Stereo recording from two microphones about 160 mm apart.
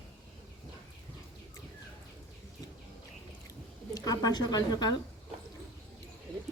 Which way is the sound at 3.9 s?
25° left (ahead or behind).